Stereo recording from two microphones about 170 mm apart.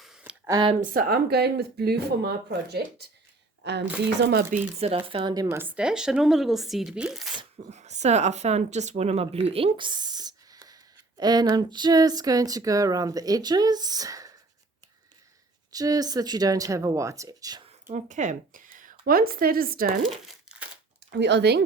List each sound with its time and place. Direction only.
0.0 s a sound: 5° right (ahead or behind)
0.4 s speech: 20° right (ahead or behind)
0.7 s a woman's voice: 50° right (ahead or behind); by 3.8 s 85° right
4.2 s speech: 70° right (ahead or behind)
4.8 s speech: 35° right (ahead or behind); by 7.3 s centre (ahead or behind)
7.6 s speech: 40° right (ahead or behind); by 14.3 s 20° right (ahead or behind)
15.7 s speech: 20° right (ahead or behind)
17.8 s speech: 45° right (ahead or behind)
20.0 s crumpling: 5° right (ahead or behind)
21.1 s speech: 85° right